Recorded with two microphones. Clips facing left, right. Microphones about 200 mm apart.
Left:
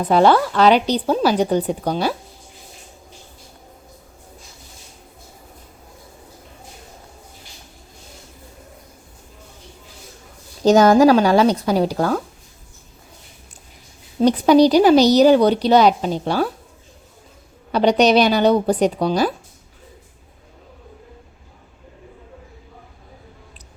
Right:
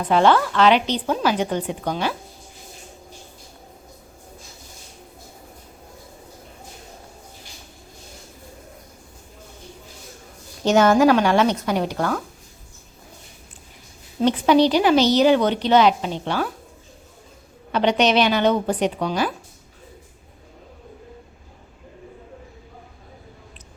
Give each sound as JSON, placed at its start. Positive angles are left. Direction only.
{"t": 0.0, "sound": "speech", "side_deg": 40}
{"t": 10.6, "sound": "speech", "side_deg": 35}
{"t": 14.2, "sound": "speech", "side_deg": 40}
{"t": 17.7, "sound": "speech", "side_deg": 35}